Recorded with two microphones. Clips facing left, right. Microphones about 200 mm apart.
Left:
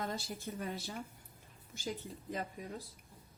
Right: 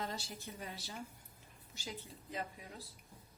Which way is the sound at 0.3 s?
50° left (ahead or behind).